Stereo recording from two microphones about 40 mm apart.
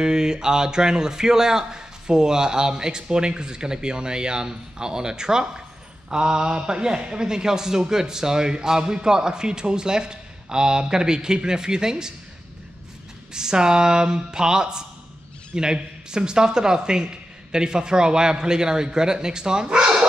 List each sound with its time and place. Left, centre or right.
0.0 s a man's voice: centre
13.3 s speech: centre